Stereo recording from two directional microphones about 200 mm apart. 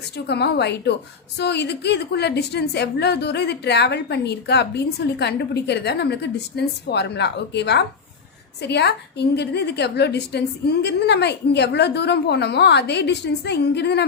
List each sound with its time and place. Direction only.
0.3 s a woman's voice: 55° left (ahead or behind)